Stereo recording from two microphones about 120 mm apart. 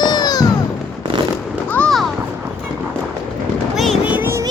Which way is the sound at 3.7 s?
Centre (ahead or behind).